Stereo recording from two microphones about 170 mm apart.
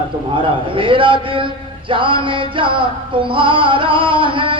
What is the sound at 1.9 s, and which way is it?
Music, 30° right (ahead or behind).